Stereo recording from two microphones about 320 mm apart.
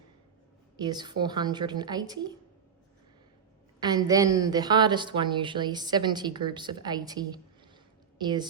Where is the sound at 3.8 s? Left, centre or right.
Centre.